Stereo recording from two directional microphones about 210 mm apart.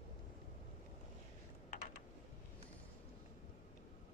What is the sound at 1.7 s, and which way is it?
Typing, 40° left (ahead or behind).